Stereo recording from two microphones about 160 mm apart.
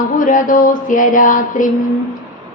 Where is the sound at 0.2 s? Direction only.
55° left (ahead or behind).